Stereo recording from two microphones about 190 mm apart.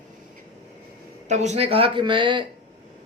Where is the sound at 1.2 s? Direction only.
35° right (ahead or behind).